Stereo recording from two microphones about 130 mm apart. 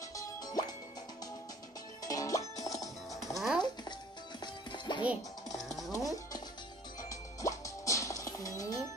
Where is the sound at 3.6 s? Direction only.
35° left (ahead or behind).